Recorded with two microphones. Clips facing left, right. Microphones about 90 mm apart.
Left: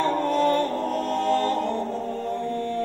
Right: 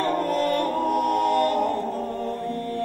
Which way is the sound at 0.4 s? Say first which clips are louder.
Left 2 dB; 25° left (ahead or behind).